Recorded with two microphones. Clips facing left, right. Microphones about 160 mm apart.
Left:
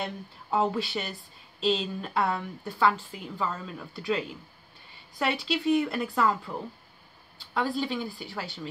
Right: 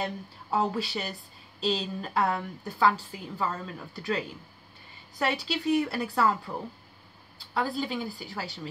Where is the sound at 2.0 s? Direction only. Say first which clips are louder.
Even; centre (ahead or behind).